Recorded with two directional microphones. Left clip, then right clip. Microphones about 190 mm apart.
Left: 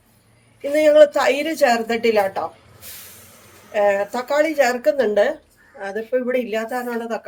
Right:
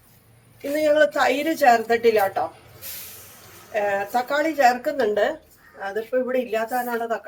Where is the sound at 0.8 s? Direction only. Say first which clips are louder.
Left 6 dB; 45° left (ahead or behind).